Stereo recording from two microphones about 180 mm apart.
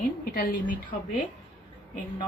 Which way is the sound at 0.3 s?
50° left (ahead or behind).